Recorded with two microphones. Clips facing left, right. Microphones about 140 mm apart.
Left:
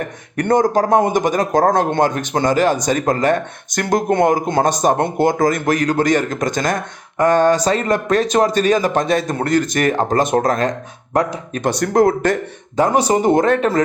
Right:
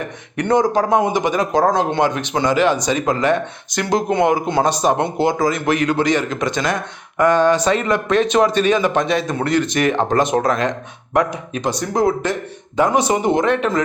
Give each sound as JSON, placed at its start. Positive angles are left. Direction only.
{"t": 0.3, "sound": "a man's voice", "side_deg": 45}
{"t": 11.6, "sound": "speech", "side_deg": 60}
{"t": 12.7, "sound": "speech", "side_deg": 35}